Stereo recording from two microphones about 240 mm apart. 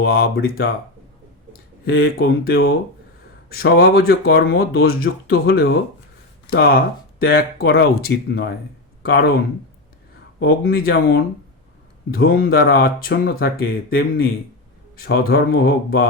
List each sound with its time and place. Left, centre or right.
0.0 s speech: left
10.4 s speech: left